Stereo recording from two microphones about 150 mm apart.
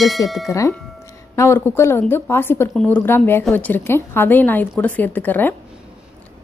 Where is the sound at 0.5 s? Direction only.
20° left (ahead or behind).